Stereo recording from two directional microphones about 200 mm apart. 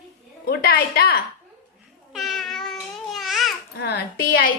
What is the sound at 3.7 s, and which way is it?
Speech, 55° left (ahead or behind).